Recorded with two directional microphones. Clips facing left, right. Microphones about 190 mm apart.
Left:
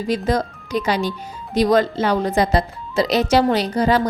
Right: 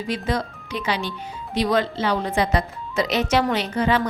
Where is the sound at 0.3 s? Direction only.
40° left (ahead or behind).